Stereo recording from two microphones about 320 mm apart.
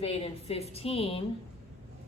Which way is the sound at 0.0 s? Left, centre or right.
Centre.